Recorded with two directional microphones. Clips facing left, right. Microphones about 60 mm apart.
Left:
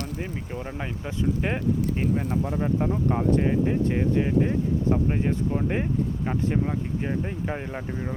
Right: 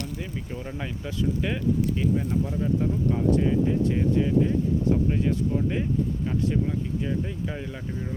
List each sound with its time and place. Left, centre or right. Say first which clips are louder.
0.5 s speech: even; left
7.0 s speech: left 1 dB; left